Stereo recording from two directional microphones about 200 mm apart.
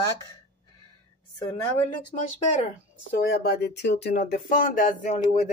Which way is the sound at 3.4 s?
55° left (ahead or behind).